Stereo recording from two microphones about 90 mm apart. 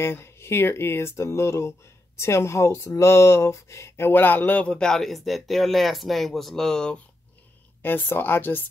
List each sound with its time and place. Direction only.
0.0 s speech: 30° left (ahead or behind); by 7.0 s 5° left (ahead or behind)
7.8 s speech: 20° left (ahead or behind)